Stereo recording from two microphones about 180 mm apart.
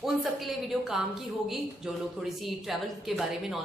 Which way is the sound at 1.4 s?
Centre (ahead or behind).